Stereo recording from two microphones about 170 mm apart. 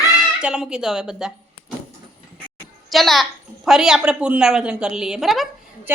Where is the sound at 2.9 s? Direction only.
Centre (ahead or behind).